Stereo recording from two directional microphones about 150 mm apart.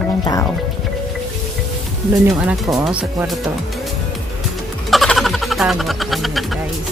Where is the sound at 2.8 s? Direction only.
Centre (ahead or behind).